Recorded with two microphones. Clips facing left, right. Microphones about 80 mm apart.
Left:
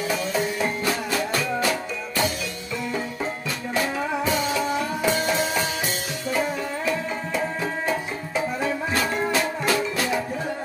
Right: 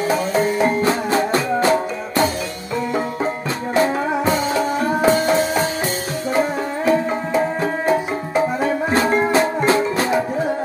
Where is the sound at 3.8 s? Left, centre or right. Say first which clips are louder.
Right 7 dB; right.